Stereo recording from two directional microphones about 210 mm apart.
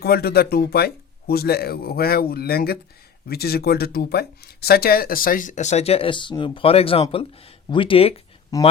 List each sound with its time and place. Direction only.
0.0 s speech: 50° left (ahead or behind); by 8.5 s 25° left (ahead or behind)